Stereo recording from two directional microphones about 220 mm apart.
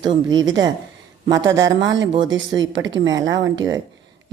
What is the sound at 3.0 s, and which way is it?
Speech, 15° right (ahead or behind).